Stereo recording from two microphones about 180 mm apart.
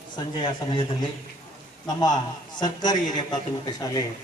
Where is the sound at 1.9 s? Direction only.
20° left (ahead or behind).